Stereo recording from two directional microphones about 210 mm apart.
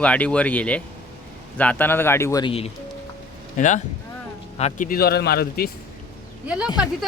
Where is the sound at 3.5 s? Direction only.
35° left (ahead or behind).